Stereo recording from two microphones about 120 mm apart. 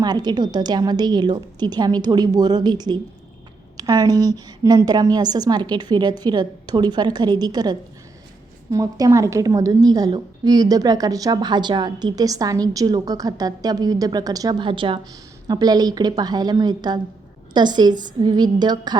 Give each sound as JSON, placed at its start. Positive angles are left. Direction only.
{"t": 0.0, "sound": "a woman's voice", "side_deg": -35}
{"t": 14.7, "sound": "a woman's voice", "side_deg": -45}
{"t": 15.4, "sound": "a woman's voice", "side_deg": -35}